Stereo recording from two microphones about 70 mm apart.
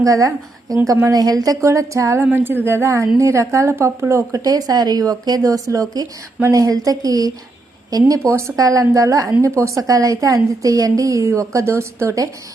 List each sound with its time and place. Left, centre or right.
0.0 s a woman's voice: right
0.9 s a woman's voice: right
1.1 s speech: right
2.1 s a woman's voice: right
4.4 s speech: right
8.3 s a woman's voice: right
8.5 s a woman's voice: right